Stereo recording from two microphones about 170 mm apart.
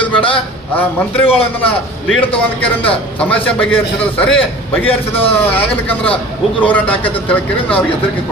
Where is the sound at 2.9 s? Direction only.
10° left (ahead or behind).